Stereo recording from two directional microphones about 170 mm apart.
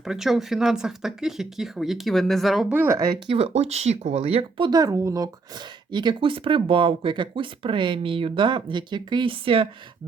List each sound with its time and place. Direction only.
0.0 s speech: 5° right (ahead or behind)
2.7 s a woman's voice: 15° right (ahead or behind)
3.3 s speech: 35° right (ahead or behind)